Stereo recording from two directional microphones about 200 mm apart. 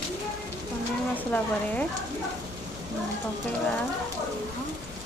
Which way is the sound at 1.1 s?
5° left (ahead or behind).